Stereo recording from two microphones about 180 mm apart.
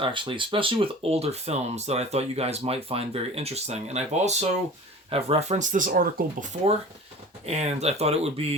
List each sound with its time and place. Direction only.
0.0 s speech: 30° right (ahead or behind)